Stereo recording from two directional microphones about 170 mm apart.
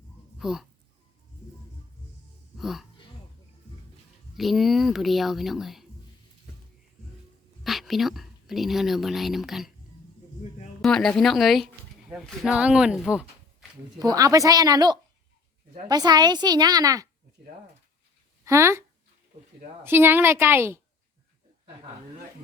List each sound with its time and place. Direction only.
0.3 s a sound: 5° right (ahead or behind)
2.6 s speech: centre (ahead or behind)
4.4 s speech: centre (ahead or behind)
7.6 s speech: centre (ahead or behind)
10.8 s speech: centre (ahead or behind)
14.0 s a woman's voice: 20° right (ahead or behind)
18.4 s a woman's voice: 15° right (ahead or behind)